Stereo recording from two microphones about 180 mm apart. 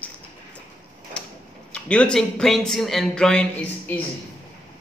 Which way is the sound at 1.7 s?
5° left (ahead or behind).